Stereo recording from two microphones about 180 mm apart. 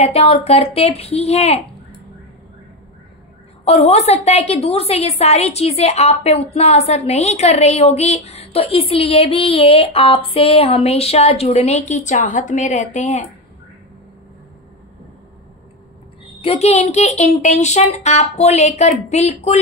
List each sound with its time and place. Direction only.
0.0 s a woman's voice: 35° left (ahead or behind)
3.6 s a woman's voice: 35° left (ahead or behind)
16.3 s a woman's voice: 35° left (ahead or behind)